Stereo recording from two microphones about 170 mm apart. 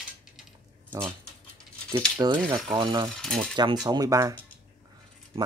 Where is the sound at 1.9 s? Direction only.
25° right (ahead or behind).